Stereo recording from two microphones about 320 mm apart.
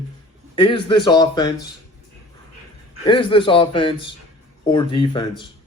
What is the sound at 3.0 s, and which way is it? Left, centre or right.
A man's voice, centre.